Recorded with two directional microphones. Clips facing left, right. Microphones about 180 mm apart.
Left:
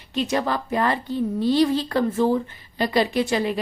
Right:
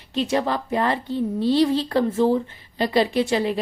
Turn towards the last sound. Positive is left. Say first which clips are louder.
# right 1 dB
turn(degrees=-30)  # may be behind; listen again after turning